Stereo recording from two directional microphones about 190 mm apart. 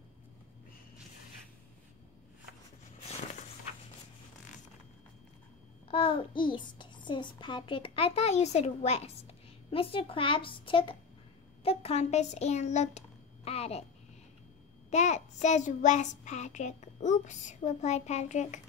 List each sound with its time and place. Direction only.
5.9 s a child's voice: 30° left (ahead or behind)
14.9 s child singing: 35° left (ahead or behind)